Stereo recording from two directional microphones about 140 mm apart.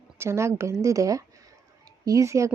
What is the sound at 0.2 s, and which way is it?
Speech, 20° right (ahead or behind).